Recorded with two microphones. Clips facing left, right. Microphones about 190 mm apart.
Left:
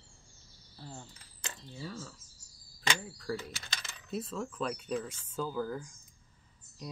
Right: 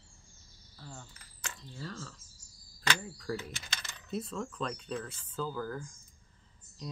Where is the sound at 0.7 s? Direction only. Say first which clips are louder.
Left 2 dB; 25° left (ahead or behind).